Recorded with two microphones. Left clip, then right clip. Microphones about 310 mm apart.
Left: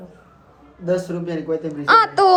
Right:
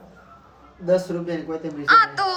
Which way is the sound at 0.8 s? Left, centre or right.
Centre.